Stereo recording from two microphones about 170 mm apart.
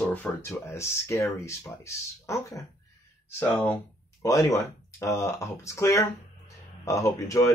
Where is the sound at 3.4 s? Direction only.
10° left (ahead or behind).